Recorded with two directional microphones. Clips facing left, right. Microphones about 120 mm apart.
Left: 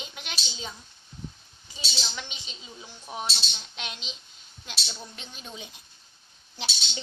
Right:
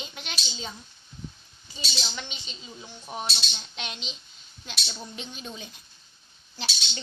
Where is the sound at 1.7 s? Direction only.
5° left (ahead or behind).